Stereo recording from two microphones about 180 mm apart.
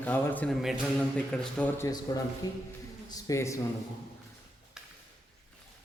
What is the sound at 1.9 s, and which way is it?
A man's voice, 20° left (ahead or behind).